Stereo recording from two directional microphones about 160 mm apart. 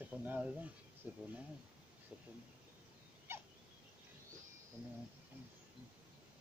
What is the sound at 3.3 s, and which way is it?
Dog, 15° right (ahead or behind).